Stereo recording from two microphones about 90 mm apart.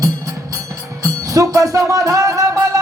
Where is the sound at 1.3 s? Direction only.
40° right (ahead or behind).